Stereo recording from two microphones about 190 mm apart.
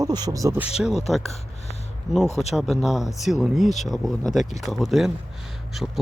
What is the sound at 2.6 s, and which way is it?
Speech, centre (ahead or behind).